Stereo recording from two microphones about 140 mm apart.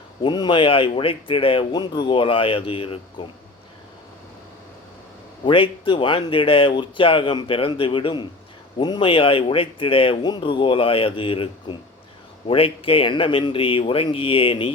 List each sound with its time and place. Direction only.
0.2 s speech: 30° left (ahead or behind)
5.5 s speech: 35° left (ahead or behind)